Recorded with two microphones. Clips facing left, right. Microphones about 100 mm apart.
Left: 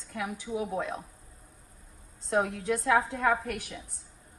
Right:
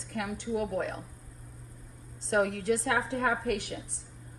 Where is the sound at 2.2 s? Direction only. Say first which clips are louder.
Right 1 dB; 80° right.